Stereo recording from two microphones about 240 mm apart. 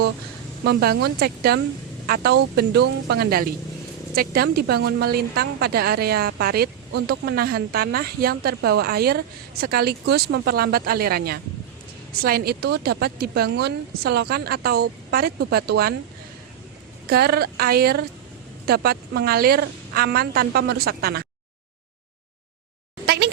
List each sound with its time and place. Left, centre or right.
0.6 s a woman's voice: right
17.1 s a woman's voice: right
23.0 s a sound: right